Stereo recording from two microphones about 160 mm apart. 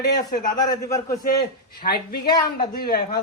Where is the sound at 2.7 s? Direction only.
70° left (ahead or behind).